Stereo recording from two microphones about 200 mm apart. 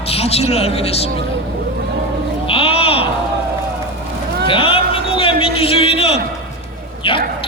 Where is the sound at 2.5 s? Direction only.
30° left (ahead or behind).